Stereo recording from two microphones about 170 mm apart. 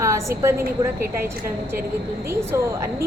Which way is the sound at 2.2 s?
15° right (ahead or behind).